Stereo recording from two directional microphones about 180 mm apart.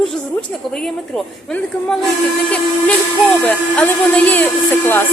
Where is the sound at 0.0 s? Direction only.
Centre (ahead or behind).